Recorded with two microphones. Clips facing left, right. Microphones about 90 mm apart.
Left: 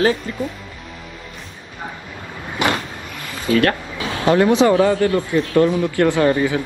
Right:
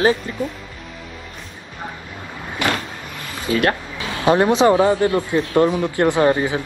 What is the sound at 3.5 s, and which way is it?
A man's voice, 25° right (ahead or behind).